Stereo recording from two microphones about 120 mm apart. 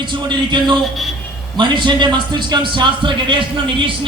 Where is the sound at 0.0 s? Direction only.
40° right (ahead or behind).